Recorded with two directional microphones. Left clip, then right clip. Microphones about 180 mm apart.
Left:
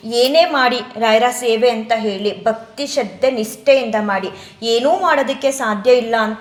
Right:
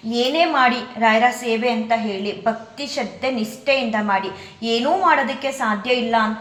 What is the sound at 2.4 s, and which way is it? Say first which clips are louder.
A woman's voice: left 4 dB; 30° left (ahead or behind).